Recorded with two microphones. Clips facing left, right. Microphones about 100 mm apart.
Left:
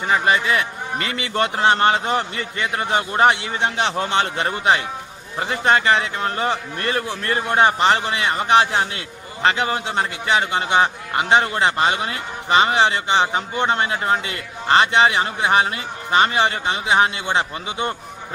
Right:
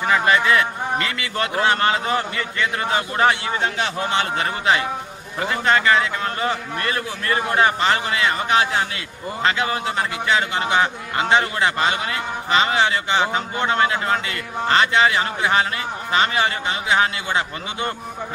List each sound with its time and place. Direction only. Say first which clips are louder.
0.1 s a man's voice: right 1 dB; 20° left (ahead or behind)